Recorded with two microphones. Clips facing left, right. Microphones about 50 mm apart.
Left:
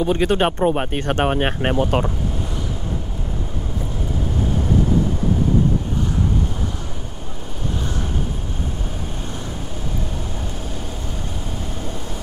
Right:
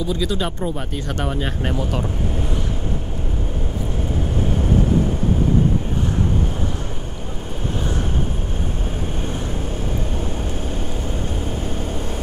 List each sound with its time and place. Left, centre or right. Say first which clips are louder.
0.0 s speech: left 5 dB; left